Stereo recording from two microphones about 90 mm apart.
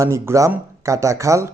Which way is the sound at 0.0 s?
30° right (ahead or behind).